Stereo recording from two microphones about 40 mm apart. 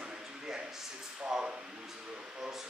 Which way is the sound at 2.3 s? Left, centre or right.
Centre.